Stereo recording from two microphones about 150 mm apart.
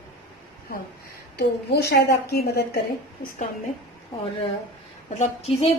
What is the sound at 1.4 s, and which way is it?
A woman's voice, 90° left.